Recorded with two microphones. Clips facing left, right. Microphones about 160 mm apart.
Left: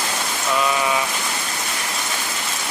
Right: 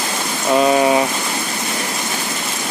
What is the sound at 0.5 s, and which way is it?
Speech, 45° right (ahead or behind).